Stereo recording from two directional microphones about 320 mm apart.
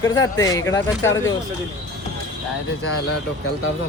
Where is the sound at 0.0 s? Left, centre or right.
Centre.